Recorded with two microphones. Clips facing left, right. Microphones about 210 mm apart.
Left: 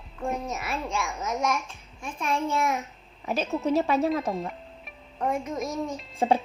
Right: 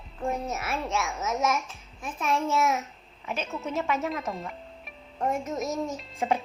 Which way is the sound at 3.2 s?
35° left (ahead or behind).